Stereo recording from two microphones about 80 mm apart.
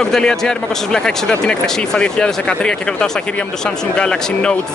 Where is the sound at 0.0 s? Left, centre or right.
Centre.